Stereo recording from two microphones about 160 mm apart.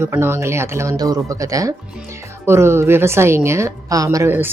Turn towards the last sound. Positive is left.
turn(degrees=-15)  # may be behind; listen again after turning